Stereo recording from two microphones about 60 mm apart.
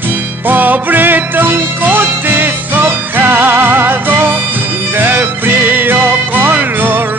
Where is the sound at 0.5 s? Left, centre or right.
Right.